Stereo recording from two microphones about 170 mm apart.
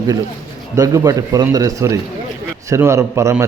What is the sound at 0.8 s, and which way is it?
A man's voice, 20° right (ahead or behind).